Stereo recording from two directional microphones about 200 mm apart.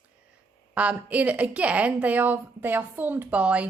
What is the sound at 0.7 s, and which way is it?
A woman's voice, 5° right (ahead or behind).